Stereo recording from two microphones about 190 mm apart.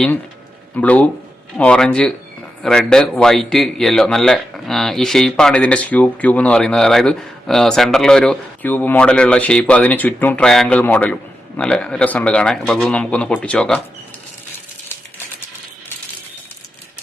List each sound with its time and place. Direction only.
0.8 s a man's voice: 5° left (ahead or behind)